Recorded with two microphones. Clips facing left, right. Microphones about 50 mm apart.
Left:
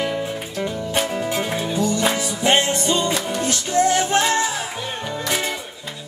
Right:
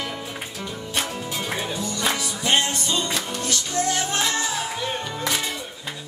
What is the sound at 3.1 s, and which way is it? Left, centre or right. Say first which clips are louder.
Music: left 5 dB; centre.